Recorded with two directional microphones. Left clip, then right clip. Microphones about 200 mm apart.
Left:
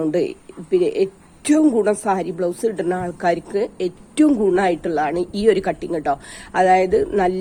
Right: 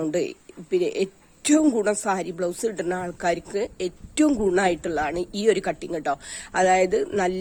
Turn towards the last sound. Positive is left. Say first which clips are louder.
# left 6 dB
turn(degrees=-25)  # may be behind; listen again after turning